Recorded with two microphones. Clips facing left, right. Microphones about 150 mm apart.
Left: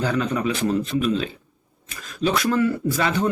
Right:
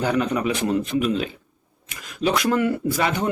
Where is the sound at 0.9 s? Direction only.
15° right (ahead or behind).